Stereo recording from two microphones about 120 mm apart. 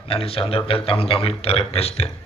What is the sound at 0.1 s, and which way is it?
A man's voice, 50° left (ahead or behind).